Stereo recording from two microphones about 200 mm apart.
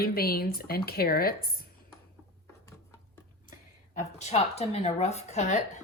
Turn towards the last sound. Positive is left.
turn(degrees=35)  # may be behind; listen again after turning